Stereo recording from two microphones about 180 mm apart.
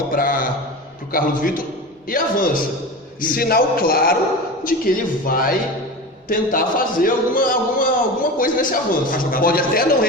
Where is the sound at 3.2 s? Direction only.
55° left (ahead or behind).